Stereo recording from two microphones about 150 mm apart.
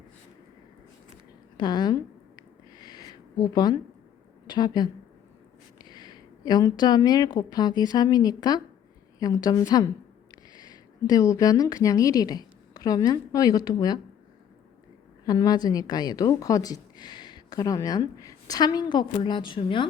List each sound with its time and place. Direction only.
1.5 s a sound: 30° left (ahead or behind)
4.4 s a woman's voice: 30° left (ahead or behind)
15.2 s a woman's voice: 25° left (ahead or behind)